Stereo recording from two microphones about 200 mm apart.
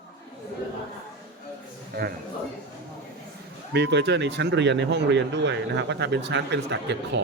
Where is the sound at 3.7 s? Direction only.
60° right (ahead or behind).